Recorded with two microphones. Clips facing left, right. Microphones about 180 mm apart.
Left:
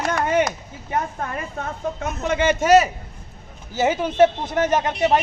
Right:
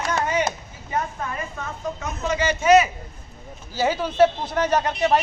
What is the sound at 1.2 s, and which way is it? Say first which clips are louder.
A woman's voice: left 2 dB; 55° left (ahead or behind).